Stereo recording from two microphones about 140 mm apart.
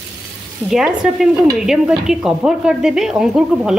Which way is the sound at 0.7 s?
5° right (ahead or behind).